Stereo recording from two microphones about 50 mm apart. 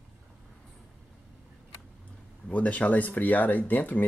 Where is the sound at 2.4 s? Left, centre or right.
Left.